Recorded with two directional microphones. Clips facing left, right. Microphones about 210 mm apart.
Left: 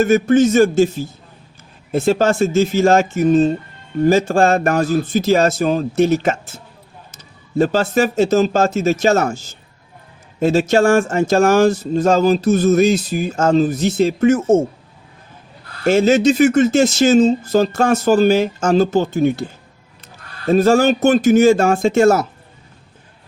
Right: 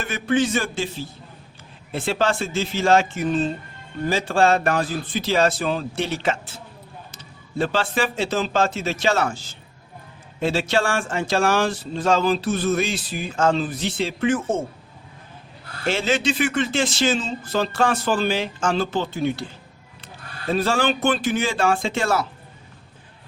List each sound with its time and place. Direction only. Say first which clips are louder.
0.0 s speech: left 10 dB; 45° left (ahead or behind)
15.8 s speech: left 10 dB; 45° left (ahead or behind)
20.5 s speech: left 9 dB; 45° left (ahead or behind)